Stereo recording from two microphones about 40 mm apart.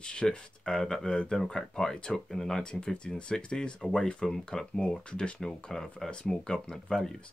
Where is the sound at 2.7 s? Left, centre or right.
Left.